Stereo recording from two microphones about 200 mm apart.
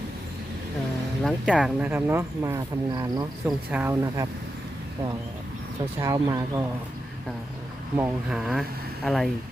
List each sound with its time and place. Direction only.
1.2 s speech: centre (ahead or behind)
6.0 s speech: 15° right (ahead or behind)
7.9 s speech: 5° right (ahead or behind)